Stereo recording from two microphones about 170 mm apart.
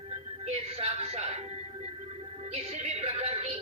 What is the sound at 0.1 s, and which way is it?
Music, 40° right (ahead or behind).